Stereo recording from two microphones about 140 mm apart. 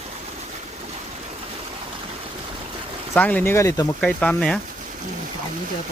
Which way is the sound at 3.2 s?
10° left (ahead or behind).